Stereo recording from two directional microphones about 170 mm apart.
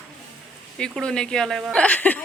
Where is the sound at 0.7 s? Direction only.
5° left (ahead or behind).